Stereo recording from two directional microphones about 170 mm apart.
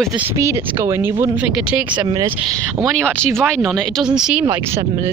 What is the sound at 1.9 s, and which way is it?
Speech, 25° right (ahead or behind).